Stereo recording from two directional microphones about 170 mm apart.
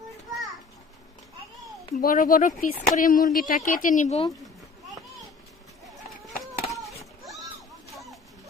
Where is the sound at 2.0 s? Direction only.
55° left (ahead or behind).